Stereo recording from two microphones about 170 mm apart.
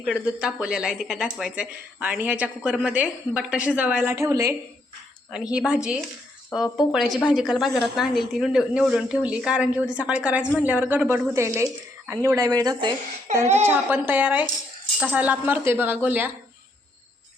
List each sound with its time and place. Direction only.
0.0 s speech: 5° right (ahead or behind)
5.3 s a woman's voice: 5° right (ahead or behind); by 12.9 s 20° right (ahead or behind)
13.3 s speech: 50° right (ahead or behind)
13.7 s speech: 10° right (ahead or behind)